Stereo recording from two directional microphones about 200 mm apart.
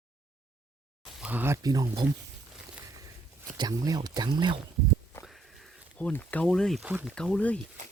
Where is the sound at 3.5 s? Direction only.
20° right (ahead or behind).